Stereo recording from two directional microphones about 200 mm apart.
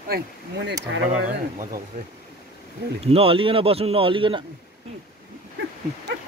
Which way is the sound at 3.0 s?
30° right (ahead or behind).